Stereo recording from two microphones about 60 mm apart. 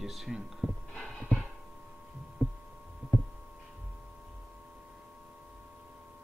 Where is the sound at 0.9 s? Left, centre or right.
Left.